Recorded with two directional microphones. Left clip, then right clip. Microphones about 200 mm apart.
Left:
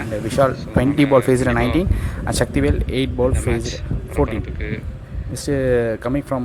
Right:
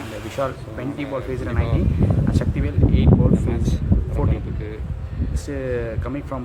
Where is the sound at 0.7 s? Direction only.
40° left (ahead or behind).